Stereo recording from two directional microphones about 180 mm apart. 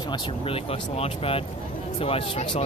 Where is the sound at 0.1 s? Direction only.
30° left (ahead or behind).